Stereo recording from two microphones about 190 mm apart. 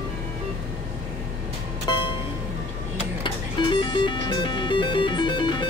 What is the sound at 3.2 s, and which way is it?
Music, 25° left (ahead or behind).